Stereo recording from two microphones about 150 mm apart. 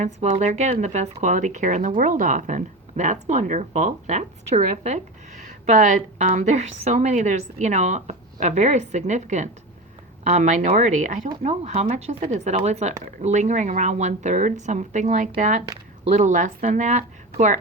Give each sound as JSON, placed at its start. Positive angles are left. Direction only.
{"t": 0.0, "sound": "a woman's voice", "side_deg": -50}